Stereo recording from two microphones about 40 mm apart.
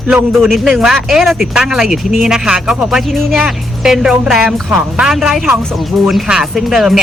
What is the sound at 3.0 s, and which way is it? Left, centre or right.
Speech, centre.